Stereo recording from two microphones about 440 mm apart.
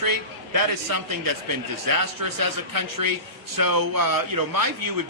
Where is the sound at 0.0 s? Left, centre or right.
Right.